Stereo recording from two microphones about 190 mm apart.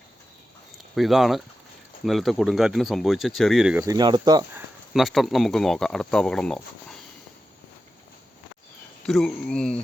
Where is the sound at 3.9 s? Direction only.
20° right (ahead or behind).